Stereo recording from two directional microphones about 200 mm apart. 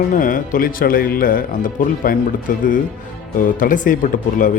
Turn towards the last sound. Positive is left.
turn(degrees=40)  # may be behind; listen again after turning